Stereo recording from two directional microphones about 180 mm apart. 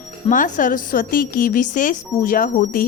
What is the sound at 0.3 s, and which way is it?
A woman's voice, 45° left (ahead or behind).